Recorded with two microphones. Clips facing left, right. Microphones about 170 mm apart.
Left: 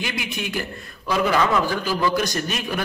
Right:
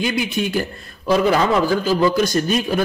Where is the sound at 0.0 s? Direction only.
30° right (ahead or behind).